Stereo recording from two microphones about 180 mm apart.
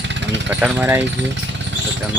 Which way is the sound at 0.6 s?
10° right (ahead or behind).